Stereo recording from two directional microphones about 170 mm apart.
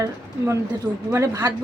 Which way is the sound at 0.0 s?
15° right (ahead or behind).